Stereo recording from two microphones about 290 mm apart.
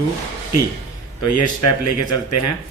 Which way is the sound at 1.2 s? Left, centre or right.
Left.